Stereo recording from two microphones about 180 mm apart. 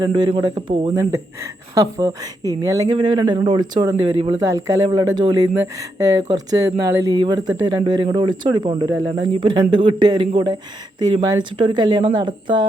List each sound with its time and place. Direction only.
0.0 s a woman's voice: 25° right (ahead or behind)